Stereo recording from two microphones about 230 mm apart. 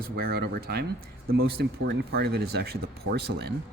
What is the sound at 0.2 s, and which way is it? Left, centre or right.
Speech, right.